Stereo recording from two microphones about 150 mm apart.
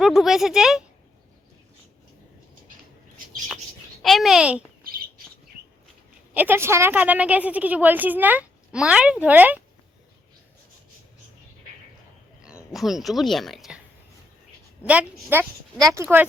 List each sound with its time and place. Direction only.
0.0 s speech: centre (ahead or behind)
4.0 s speech: centre (ahead or behind)
6.3 s a woman's voice: 15° right (ahead or behind)
12.7 s speech: centre (ahead or behind)
14.8 s a woman's voice: 10° right (ahead or behind)
15.8 s speech: 20° right (ahead or behind)